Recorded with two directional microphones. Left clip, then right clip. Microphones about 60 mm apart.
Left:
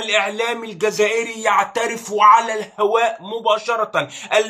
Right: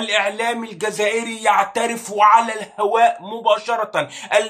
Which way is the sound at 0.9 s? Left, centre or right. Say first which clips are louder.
Even; right.